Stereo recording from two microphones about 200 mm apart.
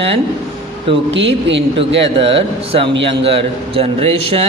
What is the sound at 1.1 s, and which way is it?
Speech, 65° right (ahead or behind).